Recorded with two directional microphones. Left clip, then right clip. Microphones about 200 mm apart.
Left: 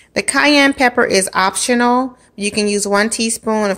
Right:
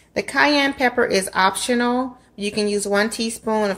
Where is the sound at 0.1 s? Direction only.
40° left (ahead or behind).